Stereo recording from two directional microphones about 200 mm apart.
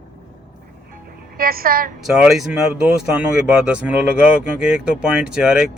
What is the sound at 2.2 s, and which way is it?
Speech, centre (ahead or behind).